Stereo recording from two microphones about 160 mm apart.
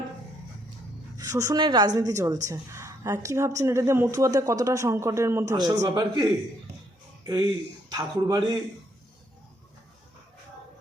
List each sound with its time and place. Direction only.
1.1 s a woman's voice: 20° right (ahead or behind)
7.3 s a woman's voice: 25° right (ahead or behind)